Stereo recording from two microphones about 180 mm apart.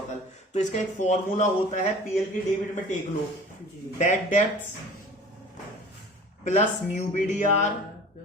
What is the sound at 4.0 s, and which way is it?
Speech, 40° left (ahead or behind).